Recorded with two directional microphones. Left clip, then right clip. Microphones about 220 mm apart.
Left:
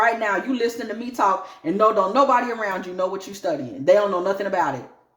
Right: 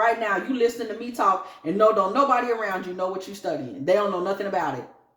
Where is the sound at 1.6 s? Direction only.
35° left (ahead or behind).